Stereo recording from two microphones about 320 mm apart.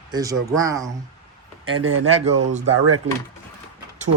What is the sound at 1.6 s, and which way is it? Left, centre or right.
Speech, right.